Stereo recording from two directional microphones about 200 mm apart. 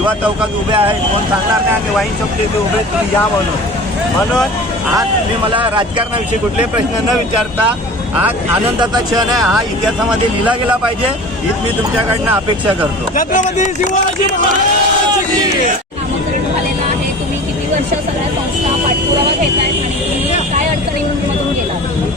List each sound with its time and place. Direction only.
0.7 s speech: 25° right (ahead or behind)
8.8 s speech: 20° right (ahead or behind)
9.4 s speech: centre (ahead or behind)
13.1 s speech: 40° left (ahead or behind)